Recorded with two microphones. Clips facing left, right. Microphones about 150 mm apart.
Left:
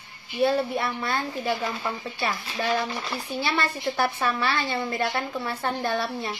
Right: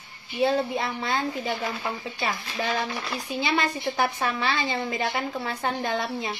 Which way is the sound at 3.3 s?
15° right (ahead or behind).